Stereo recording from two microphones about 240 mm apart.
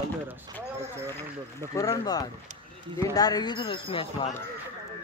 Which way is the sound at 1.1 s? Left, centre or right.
Centre.